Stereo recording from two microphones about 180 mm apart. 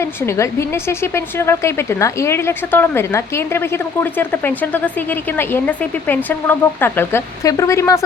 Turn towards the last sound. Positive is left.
turn(degrees=15)  # may be behind; listen again after turning